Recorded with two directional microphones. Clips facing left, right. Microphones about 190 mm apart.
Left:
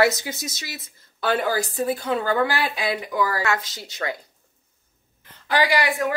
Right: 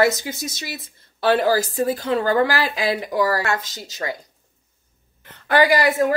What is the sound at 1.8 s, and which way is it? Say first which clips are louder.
Speech: right 3 dB; 40° right (ahead or behind).